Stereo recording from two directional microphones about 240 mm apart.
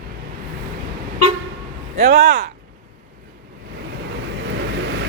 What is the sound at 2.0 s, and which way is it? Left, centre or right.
Speech, right.